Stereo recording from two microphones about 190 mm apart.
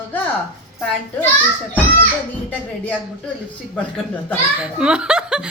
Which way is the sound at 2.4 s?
10° left (ahead or behind).